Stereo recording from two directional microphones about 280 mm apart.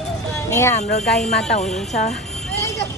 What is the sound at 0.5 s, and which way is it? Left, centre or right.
Speech, centre.